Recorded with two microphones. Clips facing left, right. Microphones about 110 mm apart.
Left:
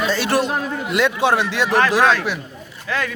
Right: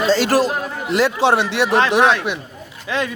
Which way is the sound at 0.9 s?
30° right (ahead or behind).